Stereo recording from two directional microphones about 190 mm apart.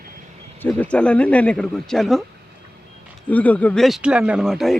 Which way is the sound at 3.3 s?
10° left (ahead or behind).